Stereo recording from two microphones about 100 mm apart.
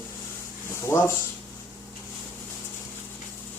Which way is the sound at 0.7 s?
25° left (ahead or behind).